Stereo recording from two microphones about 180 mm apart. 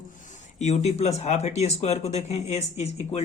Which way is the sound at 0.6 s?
40° left (ahead or behind).